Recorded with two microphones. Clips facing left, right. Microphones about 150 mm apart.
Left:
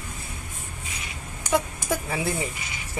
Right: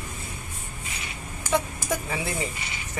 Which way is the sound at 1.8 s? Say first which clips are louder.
Left 2 dB; centre (ahead or behind).